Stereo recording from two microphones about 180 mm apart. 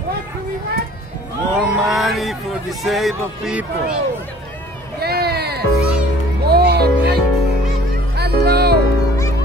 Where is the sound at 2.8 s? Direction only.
Centre (ahead or behind).